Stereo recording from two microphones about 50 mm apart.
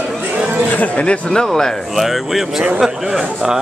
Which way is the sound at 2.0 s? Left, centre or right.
Centre.